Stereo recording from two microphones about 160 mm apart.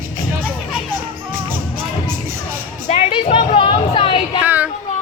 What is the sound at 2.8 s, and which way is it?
Music, 45° left (ahead or behind).